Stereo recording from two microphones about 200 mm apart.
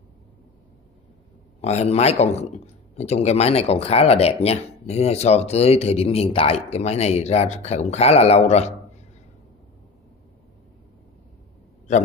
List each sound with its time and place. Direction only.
1.6 s speech: 35° left (ahead or behind)